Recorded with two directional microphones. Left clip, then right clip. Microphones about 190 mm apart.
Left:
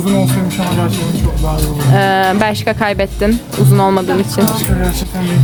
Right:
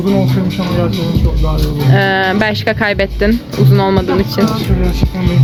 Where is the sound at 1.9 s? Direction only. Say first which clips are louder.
Left 1 dB; 15° left (ahead or behind).